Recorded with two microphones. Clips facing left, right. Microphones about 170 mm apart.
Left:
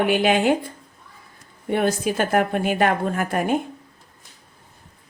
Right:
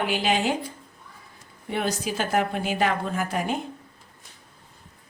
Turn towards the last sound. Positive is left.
turn(degrees=55)  # may be behind; listen again after turning